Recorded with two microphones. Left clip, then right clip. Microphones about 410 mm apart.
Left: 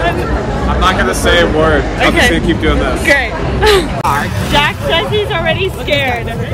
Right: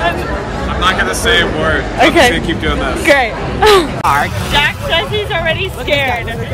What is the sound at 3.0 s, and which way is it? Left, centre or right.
Speech, centre.